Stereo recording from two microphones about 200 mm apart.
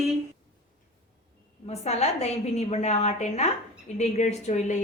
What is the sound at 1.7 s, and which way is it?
A woman's voice, 30° left (ahead or behind).